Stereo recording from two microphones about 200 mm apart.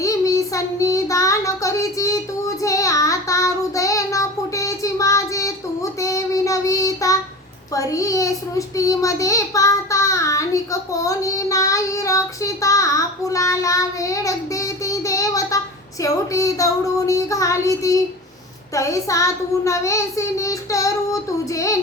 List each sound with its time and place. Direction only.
0.0 s child singing: 15° left (ahead or behind)
7.7 s a child's voice: 15° left (ahead or behind)
18.7 s child singing: 15° left (ahead or behind)